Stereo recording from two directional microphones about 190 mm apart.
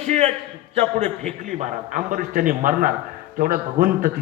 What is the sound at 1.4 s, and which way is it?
A man's voice, 45° right (ahead or behind).